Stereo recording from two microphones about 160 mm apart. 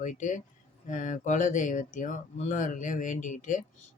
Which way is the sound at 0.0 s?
50° left (ahead or behind).